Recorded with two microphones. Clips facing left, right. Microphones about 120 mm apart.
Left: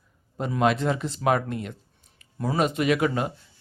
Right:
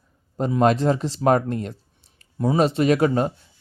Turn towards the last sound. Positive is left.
turn(degrees=-35)  # may be behind; listen again after turning